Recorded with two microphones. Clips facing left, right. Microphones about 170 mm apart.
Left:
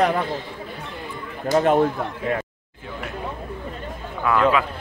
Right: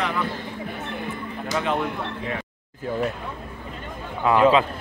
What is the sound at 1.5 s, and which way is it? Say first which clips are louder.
Speech: left 8 dB; 45° left (ahead or behind).